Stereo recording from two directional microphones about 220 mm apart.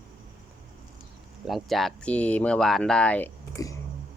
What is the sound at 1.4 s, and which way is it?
Speech, centre (ahead or behind).